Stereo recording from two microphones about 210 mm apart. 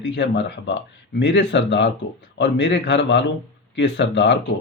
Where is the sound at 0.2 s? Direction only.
60° left (ahead or behind).